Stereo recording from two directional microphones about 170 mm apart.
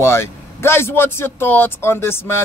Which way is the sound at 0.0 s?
15° left (ahead or behind).